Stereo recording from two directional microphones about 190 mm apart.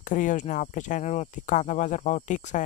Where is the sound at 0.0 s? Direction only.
45° left (ahead or behind).